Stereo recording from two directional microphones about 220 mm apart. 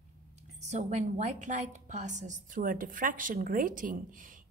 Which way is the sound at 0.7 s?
30° right (ahead or behind).